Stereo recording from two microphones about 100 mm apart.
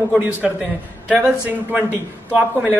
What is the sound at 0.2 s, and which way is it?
Speech, 15° right (ahead or behind).